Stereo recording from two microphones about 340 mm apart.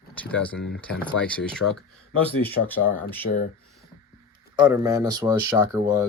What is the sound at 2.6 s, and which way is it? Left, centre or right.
Speech, left.